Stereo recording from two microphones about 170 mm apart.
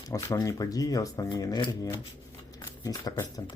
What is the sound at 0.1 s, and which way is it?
Speech, 20° left (ahead or behind).